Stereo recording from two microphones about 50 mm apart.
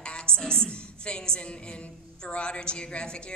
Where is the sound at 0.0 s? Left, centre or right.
Centre.